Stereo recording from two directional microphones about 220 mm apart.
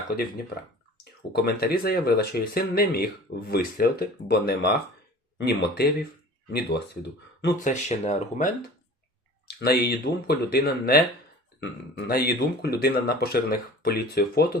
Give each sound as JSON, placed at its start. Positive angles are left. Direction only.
{"t": 1.3, "sound": "speech", "side_deg": 45}
{"t": 7.6, "sound": "speech", "side_deg": 30}
{"t": 9.5, "sound": "speech", "side_deg": 45}
{"t": 12.0, "sound": "speech", "side_deg": 45}